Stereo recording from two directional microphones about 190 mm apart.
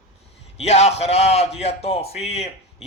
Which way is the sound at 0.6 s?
35° left (ahead or behind).